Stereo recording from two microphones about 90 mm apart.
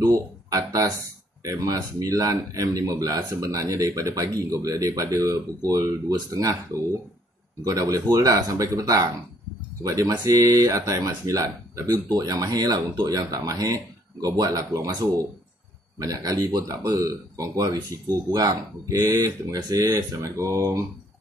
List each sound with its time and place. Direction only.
0.0 s speech: 40° right (ahead or behind)
7.6 s speech: 40° right (ahead or behind)